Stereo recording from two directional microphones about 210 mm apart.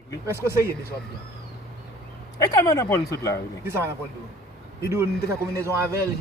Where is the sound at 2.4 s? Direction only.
15° left (ahead or behind).